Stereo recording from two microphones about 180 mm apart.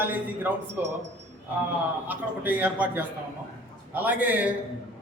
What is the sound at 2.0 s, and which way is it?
A man's voice, 10° right (ahead or behind).